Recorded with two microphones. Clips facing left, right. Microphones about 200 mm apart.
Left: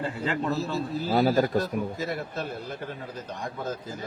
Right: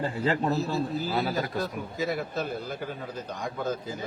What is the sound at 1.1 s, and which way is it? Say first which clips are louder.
Speech: left 12 dB; 40° left (ahead or behind).